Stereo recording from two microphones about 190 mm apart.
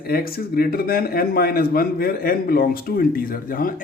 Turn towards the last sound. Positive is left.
turn(degrees=50)  # may be behind; listen again after turning